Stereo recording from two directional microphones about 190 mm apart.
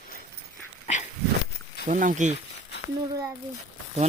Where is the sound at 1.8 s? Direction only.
40° right (ahead or behind).